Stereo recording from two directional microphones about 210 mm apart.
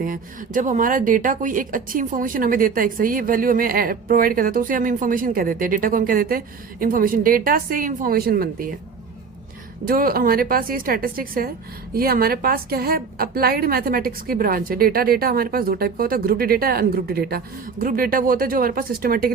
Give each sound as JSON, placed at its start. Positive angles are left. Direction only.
{"t": 0.0, "sound": "speech", "side_deg": -40}
{"t": 9.8, "sound": "a woman's voice", "side_deg": -45}